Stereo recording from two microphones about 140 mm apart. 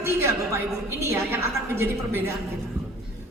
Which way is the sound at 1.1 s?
15° right (ahead or behind).